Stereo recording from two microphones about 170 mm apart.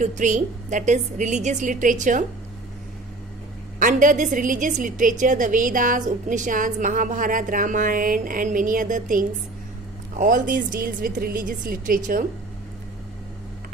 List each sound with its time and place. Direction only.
0.0 s a woman's voice: 45° right (ahead or behind)
3.8 s a woman's voice: 50° right (ahead or behind)